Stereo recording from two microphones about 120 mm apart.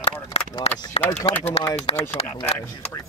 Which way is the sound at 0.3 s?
55° left (ahead or behind).